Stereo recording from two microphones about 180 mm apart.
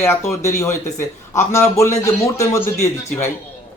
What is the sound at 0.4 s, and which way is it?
A man's voice, 15° left (ahead or behind).